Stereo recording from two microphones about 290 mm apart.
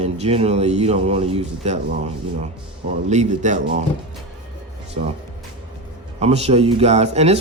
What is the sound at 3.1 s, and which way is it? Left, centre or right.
Speech, right.